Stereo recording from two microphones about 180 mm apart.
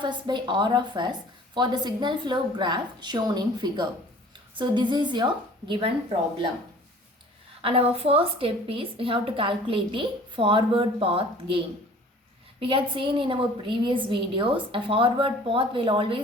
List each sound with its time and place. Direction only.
0.0 s a woman's voice: 25° right (ahead or behind)
7.6 s a woman's voice: 30° right (ahead or behind)